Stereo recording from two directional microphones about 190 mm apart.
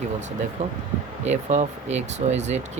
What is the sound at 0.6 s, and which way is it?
Speech, 35° right (ahead or behind).